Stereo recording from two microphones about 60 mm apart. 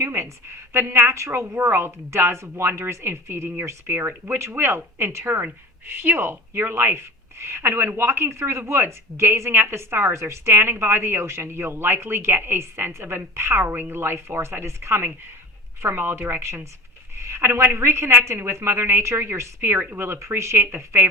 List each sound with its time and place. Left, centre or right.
0.0 s a woman's voice: right